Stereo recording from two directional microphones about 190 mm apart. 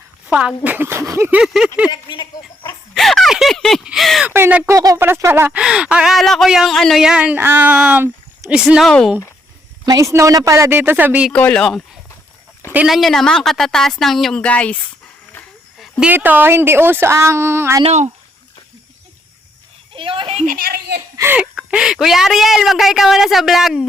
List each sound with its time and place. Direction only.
0.3 s speech: 5° right (ahead or behind)
1.9 s speech: 25° left (ahead or behind)
2.9 s speech: centre (ahead or behind)
9.8 s speech: 20° right (ahead or behind)
11.3 s speech: 5° left (ahead or behind); by 17.8 s 15° right (ahead or behind)
17.8 s speech: 35° right (ahead or behind)
19.9 s speech: 25° right (ahead or behind)
20.4 s a woman's voice: 45° right (ahead or behind)
21.2 s speech: 10° right (ahead or behind)